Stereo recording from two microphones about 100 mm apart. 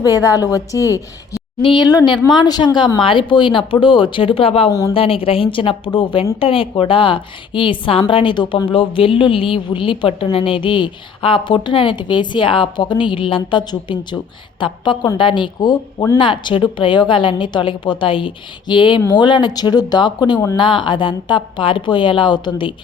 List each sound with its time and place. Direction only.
0.0 s a woman's voice: 35° left (ahead or behind)
1.6 s a woman's voice: 50° left (ahead or behind); by 4.7 s 70° left (ahead or behind)
4.7 s a woman's voice: 30° left (ahead or behind)
4.9 s a woman's voice: 65° left (ahead or behind)